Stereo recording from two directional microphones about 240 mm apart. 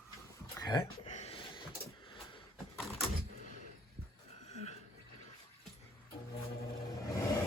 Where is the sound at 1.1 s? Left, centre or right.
Left.